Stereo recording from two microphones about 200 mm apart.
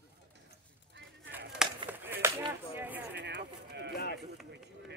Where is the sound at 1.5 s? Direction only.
5° right (ahead or behind).